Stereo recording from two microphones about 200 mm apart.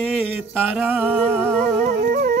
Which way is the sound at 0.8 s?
10° right (ahead or behind).